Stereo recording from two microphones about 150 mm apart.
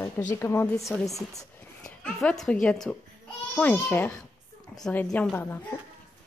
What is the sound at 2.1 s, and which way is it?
A woman's voice, 5° left (ahead or behind).